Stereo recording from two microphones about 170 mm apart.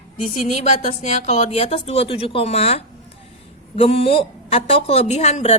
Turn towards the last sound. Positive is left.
turn(degrees=40)  # may be behind; listen again after turning